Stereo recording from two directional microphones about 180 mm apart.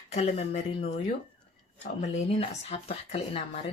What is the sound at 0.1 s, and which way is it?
Speech, 35° left (ahead or behind).